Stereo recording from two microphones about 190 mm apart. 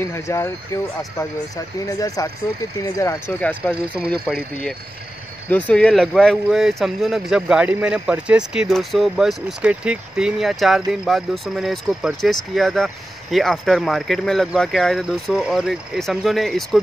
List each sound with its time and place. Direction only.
0.0 s speech: 15° left (ahead or behind)
3.3 s speech: 5° left (ahead or behind)
5.5 s speech: 10° left (ahead or behind)